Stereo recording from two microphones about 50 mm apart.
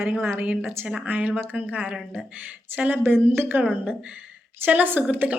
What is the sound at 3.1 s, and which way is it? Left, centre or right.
Speech, right.